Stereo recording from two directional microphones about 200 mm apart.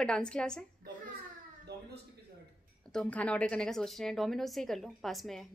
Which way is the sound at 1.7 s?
55° right (ahead or behind).